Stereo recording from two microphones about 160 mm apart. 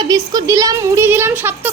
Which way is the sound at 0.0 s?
25° right (ahead or behind).